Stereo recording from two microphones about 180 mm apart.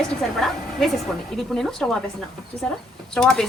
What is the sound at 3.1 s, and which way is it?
Speech, 5° left (ahead or behind).